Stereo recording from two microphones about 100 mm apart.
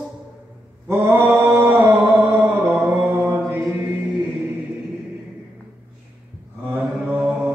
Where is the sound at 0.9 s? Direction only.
25° right (ahead or behind).